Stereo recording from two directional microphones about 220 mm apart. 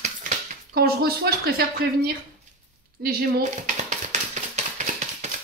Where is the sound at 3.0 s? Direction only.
45° right (ahead or behind).